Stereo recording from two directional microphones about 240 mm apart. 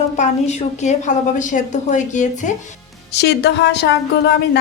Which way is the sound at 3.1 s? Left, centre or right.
Left.